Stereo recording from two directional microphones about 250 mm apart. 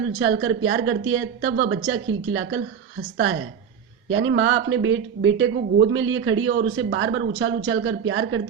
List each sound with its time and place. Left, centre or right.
0.2 s speech: right
4.1 s speech: right